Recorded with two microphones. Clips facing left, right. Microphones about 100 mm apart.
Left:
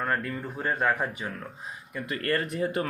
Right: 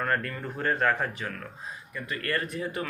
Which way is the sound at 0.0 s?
10° left (ahead or behind).